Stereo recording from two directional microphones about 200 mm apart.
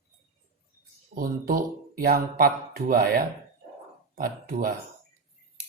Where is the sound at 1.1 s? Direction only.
45° right (ahead or behind).